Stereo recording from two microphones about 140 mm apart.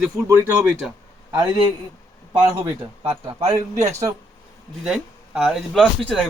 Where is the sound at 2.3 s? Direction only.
10° right (ahead or behind).